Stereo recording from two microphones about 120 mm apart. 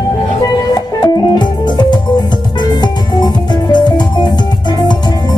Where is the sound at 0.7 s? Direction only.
35° left (ahead or behind).